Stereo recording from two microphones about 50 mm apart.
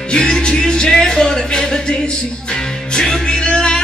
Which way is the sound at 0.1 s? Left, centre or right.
Centre.